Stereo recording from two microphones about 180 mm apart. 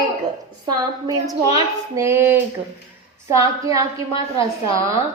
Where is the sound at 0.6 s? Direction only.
20° right (ahead or behind).